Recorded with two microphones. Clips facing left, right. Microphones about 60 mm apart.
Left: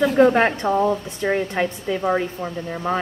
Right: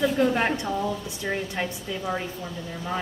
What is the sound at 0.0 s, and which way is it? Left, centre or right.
A woman's voice, left.